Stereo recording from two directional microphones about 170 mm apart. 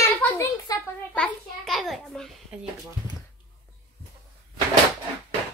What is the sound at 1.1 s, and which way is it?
A child's voice, 10° left (ahead or behind).